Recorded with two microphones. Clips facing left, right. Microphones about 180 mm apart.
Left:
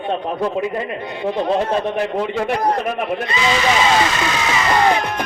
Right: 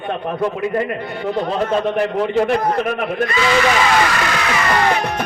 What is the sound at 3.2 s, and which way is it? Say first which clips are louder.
Speech: right 3 dB; 20° left (ahead or behind).